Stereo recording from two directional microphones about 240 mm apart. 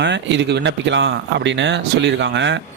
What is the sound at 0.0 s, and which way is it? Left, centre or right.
Speech, right.